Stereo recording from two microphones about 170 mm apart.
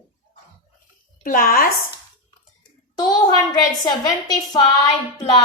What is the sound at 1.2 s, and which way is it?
Speech, 55° left (ahead or behind).